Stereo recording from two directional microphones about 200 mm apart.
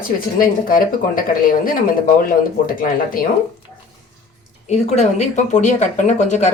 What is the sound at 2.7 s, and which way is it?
Speech, 45° left (ahead or behind).